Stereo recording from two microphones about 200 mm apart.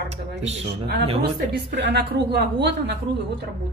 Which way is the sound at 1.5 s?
60° right (ahead or behind).